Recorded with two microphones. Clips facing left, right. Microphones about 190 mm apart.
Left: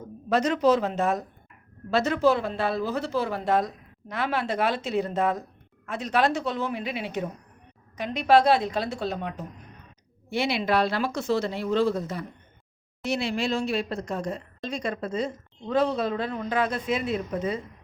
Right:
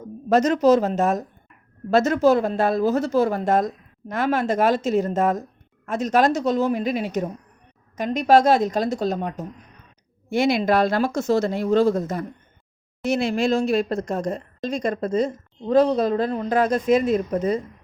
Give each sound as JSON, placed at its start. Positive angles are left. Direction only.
{"t": 0.3, "sound": "a woman's voice", "side_deg": -45}